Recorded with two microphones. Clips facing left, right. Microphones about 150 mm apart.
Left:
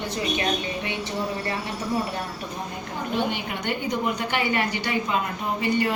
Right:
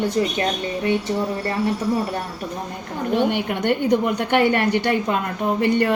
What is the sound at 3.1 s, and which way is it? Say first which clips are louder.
A woman's voice: right 7 dB; 65° right (ahead or behind).